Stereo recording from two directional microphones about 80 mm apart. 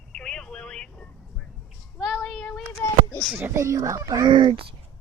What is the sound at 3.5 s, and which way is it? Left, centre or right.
Speech, right.